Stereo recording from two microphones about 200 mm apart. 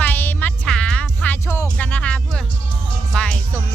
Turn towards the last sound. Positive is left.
turn(degrees=5)  # may be behind; listen again after turning